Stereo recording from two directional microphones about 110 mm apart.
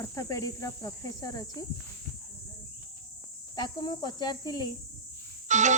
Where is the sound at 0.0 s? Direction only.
30° left (ahead or behind).